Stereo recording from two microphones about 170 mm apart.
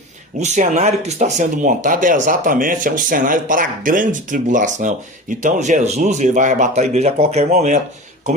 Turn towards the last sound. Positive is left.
turn(degrees=-40)  # may be behind; listen again after turning